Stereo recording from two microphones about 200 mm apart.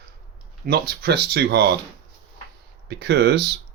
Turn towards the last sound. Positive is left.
turn(degrees=-55)  # may be behind; listen again after turning